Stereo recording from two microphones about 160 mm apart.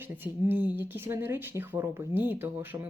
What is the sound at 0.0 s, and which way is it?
Speech, 10° right (ahead or behind).